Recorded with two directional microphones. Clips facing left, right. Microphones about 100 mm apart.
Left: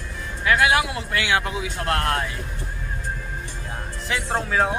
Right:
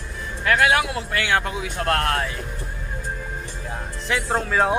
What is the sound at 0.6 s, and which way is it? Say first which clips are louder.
Speech: right 1 dB; 15° left (ahead or behind).